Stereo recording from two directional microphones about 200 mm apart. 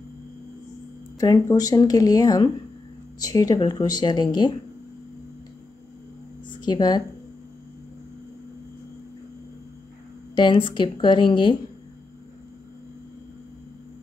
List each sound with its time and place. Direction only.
1.2 s speech: 20° left (ahead or behind)
6.5 s speech: 20° left (ahead or behind)
10.3 s speech: 25° left (ahead or behind)